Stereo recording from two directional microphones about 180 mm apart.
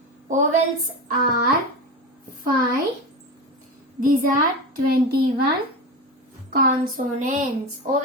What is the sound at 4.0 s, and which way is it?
A woman's voice, 50° right (ahead or behind).